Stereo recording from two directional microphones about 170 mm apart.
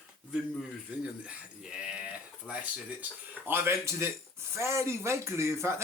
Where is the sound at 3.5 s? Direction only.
15° right (ahead or behind).